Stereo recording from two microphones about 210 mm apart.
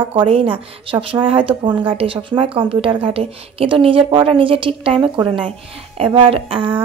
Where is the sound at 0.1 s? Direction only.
25° right (ahead or behind).